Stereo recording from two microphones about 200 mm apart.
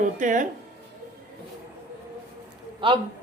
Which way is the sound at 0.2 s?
40° right (ahead or behind).